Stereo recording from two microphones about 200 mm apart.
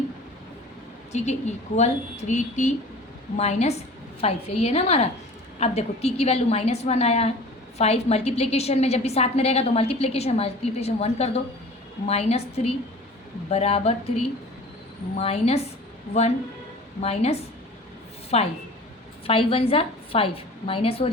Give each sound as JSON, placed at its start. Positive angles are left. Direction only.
{"t": 1.1, "sound": "a woman's voice", "side_deg": 35}
{"t": 15.2, "sound": "a woman's voice", "side_deg": 30}
{"t": 17.0, "sound": "a woman's voice", "side_deg": 30}